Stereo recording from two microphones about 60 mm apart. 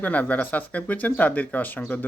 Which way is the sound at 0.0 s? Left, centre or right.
Left.